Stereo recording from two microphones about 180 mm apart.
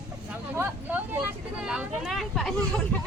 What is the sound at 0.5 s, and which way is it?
Vehicle, 10° right (ahead or behind).